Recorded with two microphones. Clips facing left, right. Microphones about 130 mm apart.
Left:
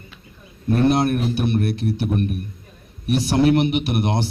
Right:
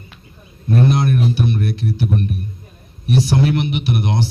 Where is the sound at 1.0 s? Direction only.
50° left (ahead or behind).